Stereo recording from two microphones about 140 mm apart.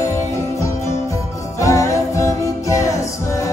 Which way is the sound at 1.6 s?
20° left (ahead or behind).